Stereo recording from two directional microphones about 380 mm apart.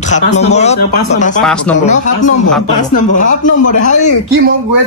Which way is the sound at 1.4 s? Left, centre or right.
Centre.